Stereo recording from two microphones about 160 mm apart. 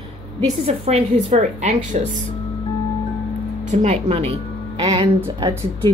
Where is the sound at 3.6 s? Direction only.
45° right (ahead or behind).